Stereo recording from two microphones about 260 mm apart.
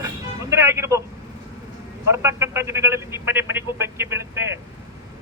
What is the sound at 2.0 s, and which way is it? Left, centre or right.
Speech, centre.